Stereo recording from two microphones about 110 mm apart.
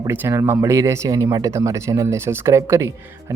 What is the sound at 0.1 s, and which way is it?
Speech, 20° right (ahead or behind).